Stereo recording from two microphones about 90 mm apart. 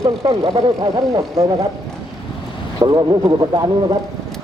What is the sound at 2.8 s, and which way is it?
Speech, 50° right (ahead or behind).